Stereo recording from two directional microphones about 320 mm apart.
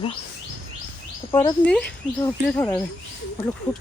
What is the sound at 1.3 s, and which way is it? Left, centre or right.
Speech, centre.